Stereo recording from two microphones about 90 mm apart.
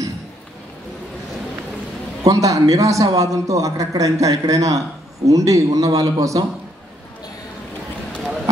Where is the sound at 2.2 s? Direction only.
40° right (ahead or behind).